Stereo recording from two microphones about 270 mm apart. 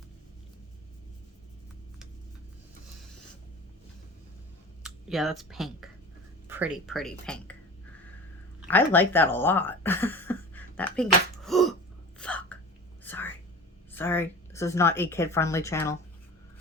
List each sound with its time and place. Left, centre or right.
4.8 s speech: centre
8.6 s speech: centre
12.2 s hiccup: centre
13.1 s whispering: centre
13.9 s a woman's voice: centre